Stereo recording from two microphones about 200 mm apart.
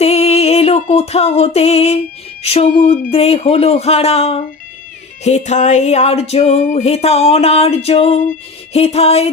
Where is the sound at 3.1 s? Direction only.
30° left (ahead or behind).